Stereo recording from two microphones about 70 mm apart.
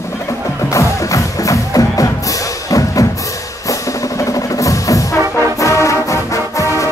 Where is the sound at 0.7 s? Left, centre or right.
Left.